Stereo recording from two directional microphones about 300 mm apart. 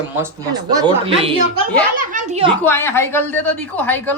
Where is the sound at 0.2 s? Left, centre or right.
Centre.